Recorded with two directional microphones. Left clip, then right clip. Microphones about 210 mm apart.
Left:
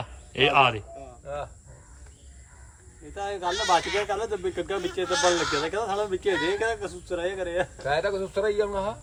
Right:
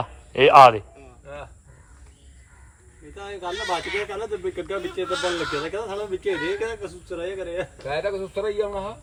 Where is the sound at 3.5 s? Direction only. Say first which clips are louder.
Left 3 dB; 35° left (ahead or behind).